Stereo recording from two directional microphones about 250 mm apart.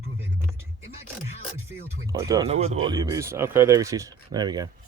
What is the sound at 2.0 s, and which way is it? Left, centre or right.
Speech, centre.